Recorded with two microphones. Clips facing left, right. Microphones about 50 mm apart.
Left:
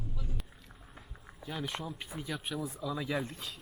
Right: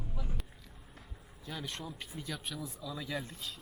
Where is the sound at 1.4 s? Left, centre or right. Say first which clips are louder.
Left 4 dB; centre.